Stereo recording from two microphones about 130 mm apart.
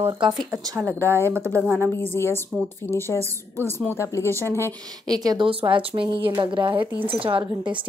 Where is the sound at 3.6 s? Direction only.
20° left (ahead or behind).